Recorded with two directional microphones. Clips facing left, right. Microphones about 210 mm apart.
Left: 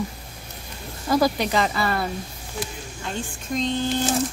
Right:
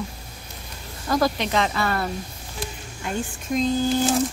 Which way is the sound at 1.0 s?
10° left (ahead or behind).